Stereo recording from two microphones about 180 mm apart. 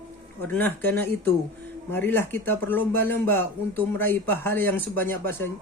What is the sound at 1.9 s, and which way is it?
Speech, 10° left (ahead or behind).